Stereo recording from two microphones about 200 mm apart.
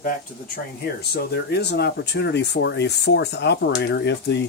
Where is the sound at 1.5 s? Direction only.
55° left (ahead or behind).